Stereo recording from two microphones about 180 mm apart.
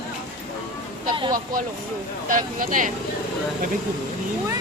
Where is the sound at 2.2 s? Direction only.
45° right (ahead or behind).